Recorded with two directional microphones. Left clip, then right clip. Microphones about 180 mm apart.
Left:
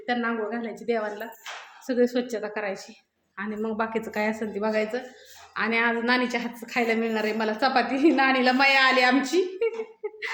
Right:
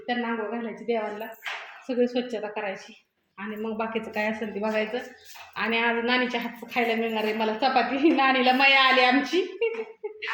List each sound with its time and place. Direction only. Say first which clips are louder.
0.0 s a woman's voice: left 2 dB; 5° left (ahead or behind)
1.9 s a woman's voice: left 2 dB; 20° left (ahead or behind)